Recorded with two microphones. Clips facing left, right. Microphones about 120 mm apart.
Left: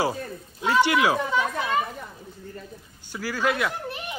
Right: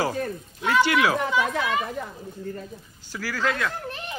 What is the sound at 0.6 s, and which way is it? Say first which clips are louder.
Speech: even; 15° left (ahead or behind).